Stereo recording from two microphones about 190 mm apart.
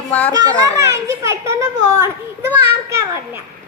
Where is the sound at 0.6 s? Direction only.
15° right (ahead or behind).